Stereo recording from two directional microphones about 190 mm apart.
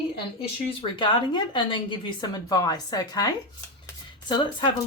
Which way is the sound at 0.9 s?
25° left (ahead or behind).